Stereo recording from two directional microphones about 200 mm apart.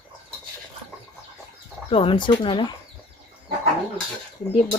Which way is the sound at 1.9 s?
25° left (ahead or behind).